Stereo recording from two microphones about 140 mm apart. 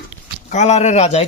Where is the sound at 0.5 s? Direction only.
55° left (ahead or behind).